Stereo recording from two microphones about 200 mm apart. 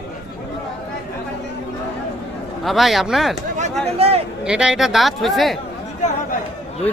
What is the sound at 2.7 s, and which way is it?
Speech, centre (ahead or behind).